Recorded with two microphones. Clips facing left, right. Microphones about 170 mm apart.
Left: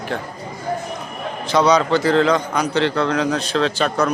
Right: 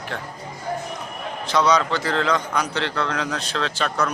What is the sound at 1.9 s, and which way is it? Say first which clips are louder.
A man's voice: left 7 dB; 5° left (ahead or behind).